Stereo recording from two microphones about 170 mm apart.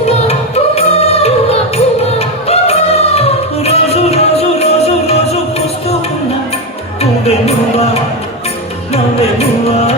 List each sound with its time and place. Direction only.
0.3 s music: 35° left (ahead or behind)
7.0 s music: 40° left (ahead or behind)
8.9 s music: 40° left (ahead or behind)